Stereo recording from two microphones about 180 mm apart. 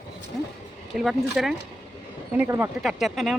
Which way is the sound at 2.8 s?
Centre (ahead or behind).